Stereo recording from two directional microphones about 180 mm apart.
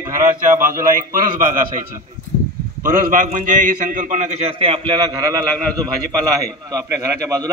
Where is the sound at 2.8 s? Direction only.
45° right (ahead or behind).